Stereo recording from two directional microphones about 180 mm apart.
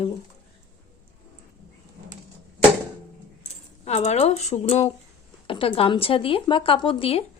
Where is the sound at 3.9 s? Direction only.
35° left (ahead or behind).